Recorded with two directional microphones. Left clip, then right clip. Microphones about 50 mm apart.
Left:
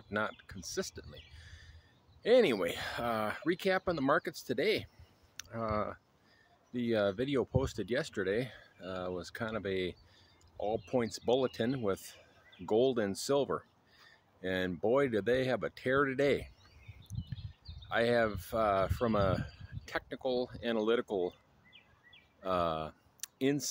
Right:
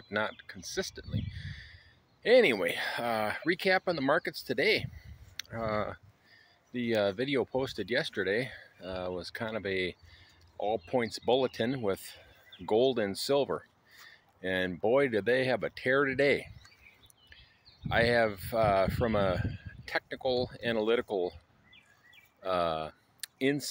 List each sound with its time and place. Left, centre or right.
0.1 s speech: centre
0.6 s a sound: centre
2.2 s speech: centre
13.1 s speech: left
14.0 s a sound: centre
14.8 s speech: centre
17.8 s speech: centre
20.4 s speech: centre
22.4 s speech: left